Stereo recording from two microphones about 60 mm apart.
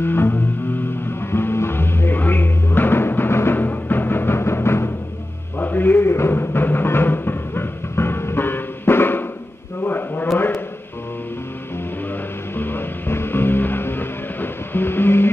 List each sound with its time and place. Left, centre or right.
0.0 s music: left
5.6 s music: left
9.8 s a sound: left
12.5 s music: left